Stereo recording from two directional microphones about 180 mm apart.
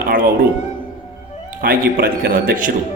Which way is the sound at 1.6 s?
50° right (ahead or behind).